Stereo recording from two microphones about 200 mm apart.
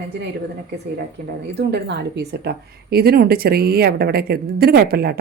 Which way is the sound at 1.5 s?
55° right (ahead or behind).